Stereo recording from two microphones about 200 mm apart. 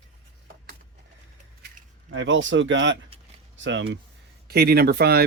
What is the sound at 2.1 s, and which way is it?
Speech, 70° right (ahead or behind).